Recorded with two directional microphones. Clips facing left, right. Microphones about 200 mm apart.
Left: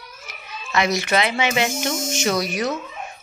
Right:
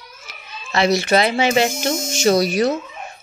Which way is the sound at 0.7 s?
30° right (ahead or behind).